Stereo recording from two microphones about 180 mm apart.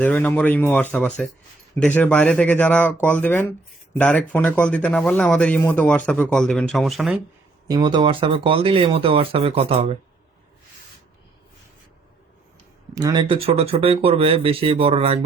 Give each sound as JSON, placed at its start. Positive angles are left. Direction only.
{"t": 0.0, "sound": "speech", "side_deg": 10}
{"t": 7.7, "sound": "speech", "side_deg": -25}
{"t": 12.9, "sound": "speech", "side_deg": -20}